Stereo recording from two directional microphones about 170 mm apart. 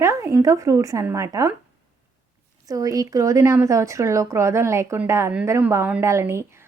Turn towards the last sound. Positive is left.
turn(degrees=-15)  # may be behind; listen again after turning